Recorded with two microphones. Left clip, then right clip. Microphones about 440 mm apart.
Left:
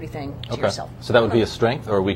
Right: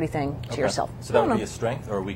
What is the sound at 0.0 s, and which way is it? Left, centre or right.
Speech, right.